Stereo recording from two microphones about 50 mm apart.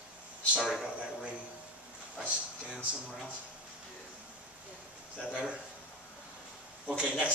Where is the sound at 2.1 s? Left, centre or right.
Centre.